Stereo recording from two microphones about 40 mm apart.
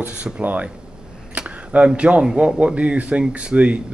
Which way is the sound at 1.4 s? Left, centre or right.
Right.